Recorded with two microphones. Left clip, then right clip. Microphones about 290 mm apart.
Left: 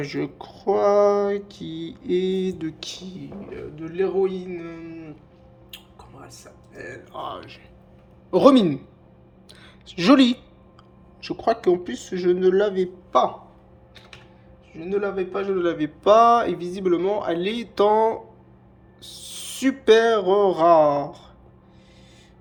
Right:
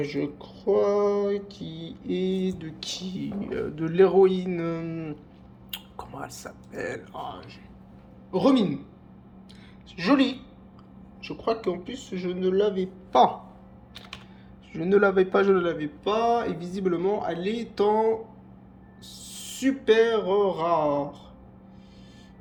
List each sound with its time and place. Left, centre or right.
0.0 s speech: centre
2.8 s speech: centre
7.1 s speech: centre
9.9 s a woman's voice: left
13.1 s a man's voice: centre
14.7 s speech: centre
15.5 s a man's voice: centre
19.0 s a sound: centre